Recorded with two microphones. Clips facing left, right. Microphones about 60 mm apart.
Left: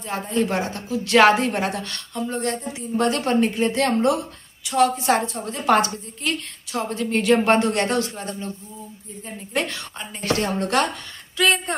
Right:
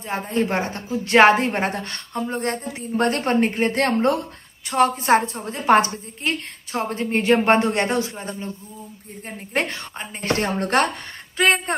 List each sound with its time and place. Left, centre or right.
0.0 s a woman's voice: right